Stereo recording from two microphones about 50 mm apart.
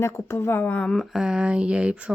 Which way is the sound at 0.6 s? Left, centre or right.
Left.